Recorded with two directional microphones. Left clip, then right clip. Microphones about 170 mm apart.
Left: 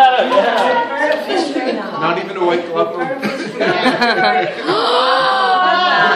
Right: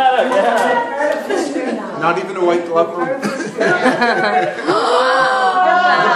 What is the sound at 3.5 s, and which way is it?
Speech, 5° right (ahead or behind).